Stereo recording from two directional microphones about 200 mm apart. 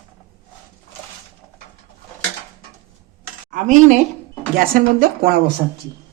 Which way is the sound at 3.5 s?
40° right (ahead or behind).